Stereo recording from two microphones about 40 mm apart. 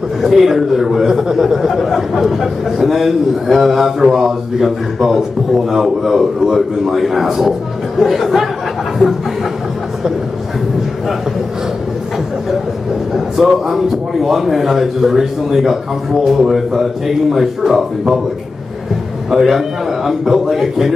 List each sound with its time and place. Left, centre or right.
0.2 s a man's voice: centre
13.1 s a man's voice: centre
19.3 s a man's voice: centre